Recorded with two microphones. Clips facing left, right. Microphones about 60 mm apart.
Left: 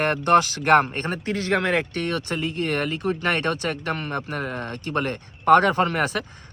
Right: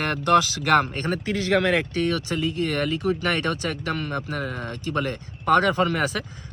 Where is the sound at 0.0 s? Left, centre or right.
Left.